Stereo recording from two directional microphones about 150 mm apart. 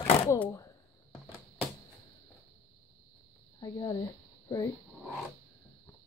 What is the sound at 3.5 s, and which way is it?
Speech, 25° left (ahead or behind).